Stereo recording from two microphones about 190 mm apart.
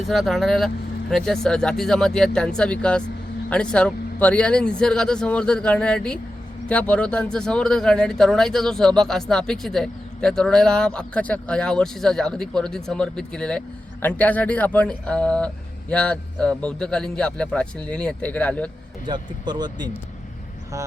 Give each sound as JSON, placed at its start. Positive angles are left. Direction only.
{"t": 0.1, "sound": "speech", "side_deg": 0}
{"t": 19.0, "sound": "speech", "side_deg": -25}